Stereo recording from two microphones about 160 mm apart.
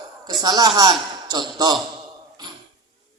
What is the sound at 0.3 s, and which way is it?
Speech, 25° right (ahead or behind).